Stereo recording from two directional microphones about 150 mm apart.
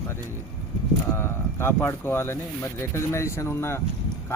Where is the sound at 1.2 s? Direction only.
15° left (ahead or behind).